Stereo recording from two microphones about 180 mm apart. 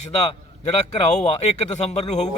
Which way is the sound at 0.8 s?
40° left (ahead or behind).